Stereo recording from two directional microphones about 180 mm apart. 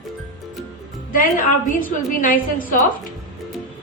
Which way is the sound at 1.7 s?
50° left (ahead or behind).